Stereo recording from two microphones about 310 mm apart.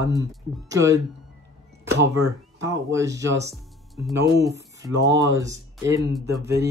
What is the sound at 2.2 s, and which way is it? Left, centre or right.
Speech, centre.